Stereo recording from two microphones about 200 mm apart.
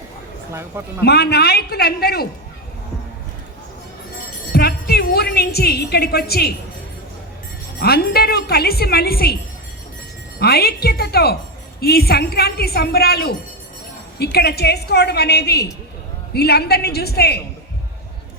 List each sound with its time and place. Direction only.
1.0 s a woman's voice: 55° left (ahead or behind)
4.5 s a woman's voice: 50° left (ahead or behind)
7.8 s a woman's voice: 50° left (ahead or behind)
10.4 s a woman's voice: 50° left (ahead or behind)